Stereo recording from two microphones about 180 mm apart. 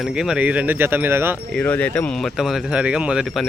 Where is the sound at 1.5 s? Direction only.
5° left (ahead or behind).